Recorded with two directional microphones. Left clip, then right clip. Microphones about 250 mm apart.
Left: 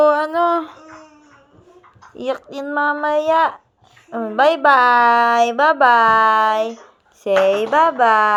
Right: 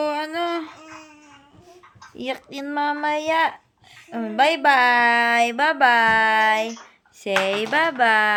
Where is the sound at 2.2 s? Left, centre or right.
Right.